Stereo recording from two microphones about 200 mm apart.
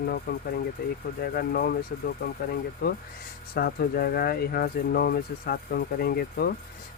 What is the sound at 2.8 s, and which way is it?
Speech, 50° left (ahead or behind).